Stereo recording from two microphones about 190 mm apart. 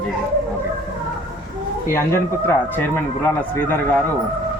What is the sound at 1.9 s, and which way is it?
Speech, 15° left (ahead or behind).